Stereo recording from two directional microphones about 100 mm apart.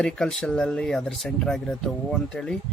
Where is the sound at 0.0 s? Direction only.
10° left (ahead or behind).